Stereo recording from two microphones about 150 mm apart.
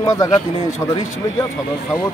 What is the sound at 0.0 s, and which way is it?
Speech, 20° left (ahead or behind).